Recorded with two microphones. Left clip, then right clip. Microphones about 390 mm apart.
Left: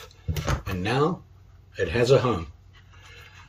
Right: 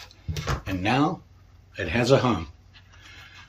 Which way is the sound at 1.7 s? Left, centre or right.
Centre.